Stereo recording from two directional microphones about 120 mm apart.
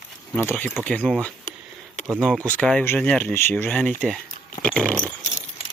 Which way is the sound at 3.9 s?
Centre (ahead or behind).